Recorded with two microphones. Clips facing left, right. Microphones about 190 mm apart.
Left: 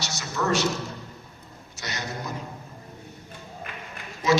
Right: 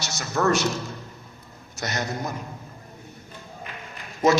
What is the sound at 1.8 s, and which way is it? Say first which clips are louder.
Speech: right 5 dB; 50° right (ahead or behind).